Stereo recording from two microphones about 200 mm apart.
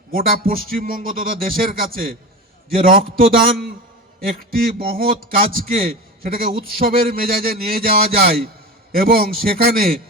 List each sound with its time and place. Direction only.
0.1 s speech: 45° right (ahead or behind)